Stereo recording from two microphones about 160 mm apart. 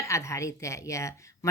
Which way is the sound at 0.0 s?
20° left (ahead or behind).